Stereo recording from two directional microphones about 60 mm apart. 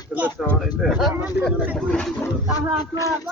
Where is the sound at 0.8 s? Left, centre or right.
Centre.